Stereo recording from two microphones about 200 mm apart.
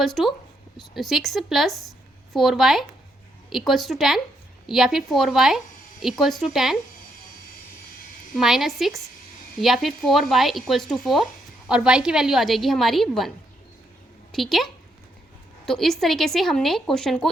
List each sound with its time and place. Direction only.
0.0 s speech: centre (ahead or behind)
8.4 s speech: centre (ahead or behind)
14.3 s speech: centre (ahead or behind)